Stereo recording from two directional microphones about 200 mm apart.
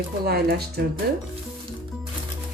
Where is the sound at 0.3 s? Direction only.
50° right (ahead or behind).